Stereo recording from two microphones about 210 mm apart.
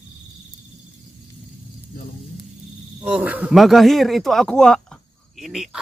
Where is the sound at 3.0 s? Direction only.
5° right (ahead or behind).